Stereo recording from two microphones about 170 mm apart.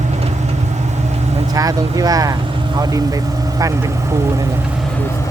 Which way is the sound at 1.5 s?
20° right (ahead or behind).